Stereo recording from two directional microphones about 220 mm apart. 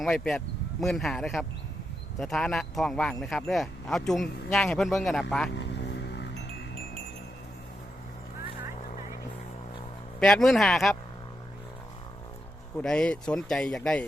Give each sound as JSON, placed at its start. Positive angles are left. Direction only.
{"t": 0.0, "sound": "speech", "side_deg": 5}
{"t": 5.5, "sound": "vehicle", "side_deg": 50}
{"t": 10.2, "sound": "speech", "side_deg": 0}
{"t": 12.7, "sound": "speech", "side_deg": 5}